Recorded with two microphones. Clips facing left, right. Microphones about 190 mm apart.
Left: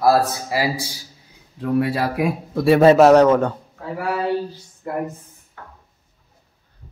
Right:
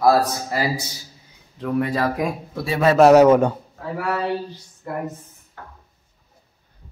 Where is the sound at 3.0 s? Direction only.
5° right (ahead or behind).